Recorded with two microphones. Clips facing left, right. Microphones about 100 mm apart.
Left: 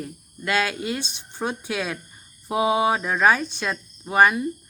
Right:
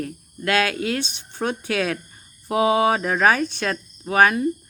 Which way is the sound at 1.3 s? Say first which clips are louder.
Right 2 dB; 5° left (ahead or behind).